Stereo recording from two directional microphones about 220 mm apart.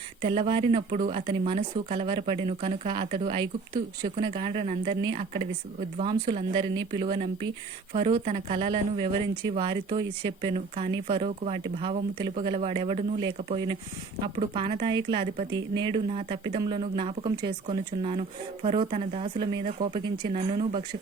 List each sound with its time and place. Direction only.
0.2 s speech: 25° right (ahead or behind)